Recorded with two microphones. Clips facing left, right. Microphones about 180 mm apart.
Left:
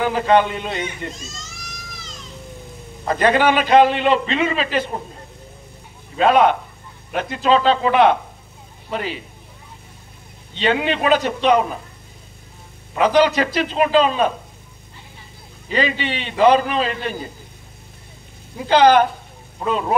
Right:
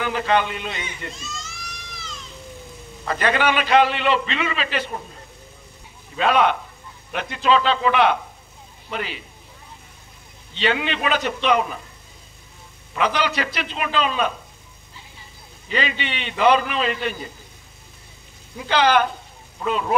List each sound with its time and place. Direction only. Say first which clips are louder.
0.0 s a man's voice: left 5 dB; 40° left (ahead or behind)
3.1 s a man's voice: left 5 dB; 40° left (ahead or behind)
6.1 s a man's voice: left 4 dB; 40° left (ahead or behind)
10.6 s a man's voice: left 4 dB; 40° left (ahead or behind)
12.9 s a man's voice: left 7 dB; 40° left (ahead or behind)
15.7 s a man's voice: left 5 dB; 40° left (ahead or behind)
18.7 s a man's voice: left 5 dB; 40° left (ahead or behind)